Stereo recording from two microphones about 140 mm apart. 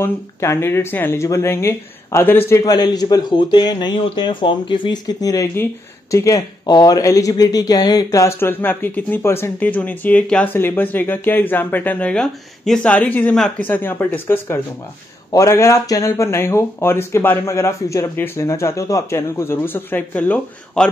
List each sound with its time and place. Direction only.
0.0 s speech: 20° left (ahead or behind)